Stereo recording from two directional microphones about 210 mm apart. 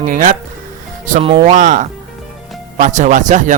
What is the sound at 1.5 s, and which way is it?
Speech, 40° right (ahead or behind).